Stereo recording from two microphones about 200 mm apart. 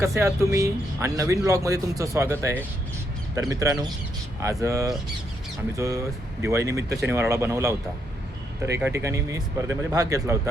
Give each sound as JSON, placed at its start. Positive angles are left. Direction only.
{"t": 0.0, "sound": "speech", "side_deg": -15}
{"t": 8.8, "sound": "speech", "side_deg": -15}